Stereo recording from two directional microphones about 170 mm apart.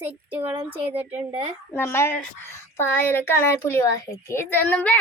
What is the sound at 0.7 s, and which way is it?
Speech, 35° right (ahead or behind).